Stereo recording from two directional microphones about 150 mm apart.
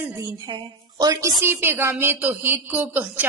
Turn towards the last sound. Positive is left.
turn(degrees=-10)  # may be behind; listen again after turning